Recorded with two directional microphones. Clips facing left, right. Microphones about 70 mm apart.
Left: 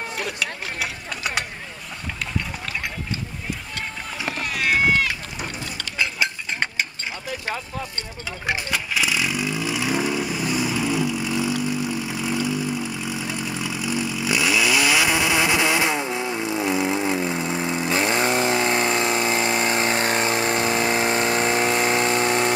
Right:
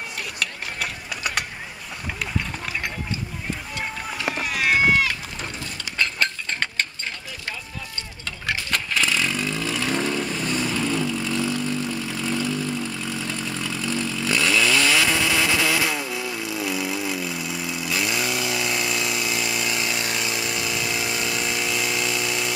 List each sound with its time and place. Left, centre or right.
0.4 s engine: centre
4.3 s run: centre
5.9 s a sound: centre
8.5 s vehicle: centre; by 22.5 s left